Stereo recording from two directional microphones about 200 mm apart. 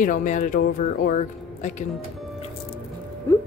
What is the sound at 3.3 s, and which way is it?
Music, 10° left (ahead or behind).